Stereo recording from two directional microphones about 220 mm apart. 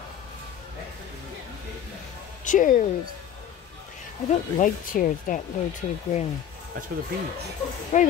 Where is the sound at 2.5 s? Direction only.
35° left (ahead or behind).